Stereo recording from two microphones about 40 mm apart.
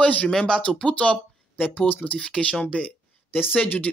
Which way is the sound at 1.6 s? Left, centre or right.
Left.